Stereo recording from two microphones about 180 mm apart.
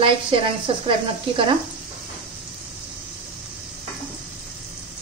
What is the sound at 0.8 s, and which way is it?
Speech, 30° right (ahead or behind).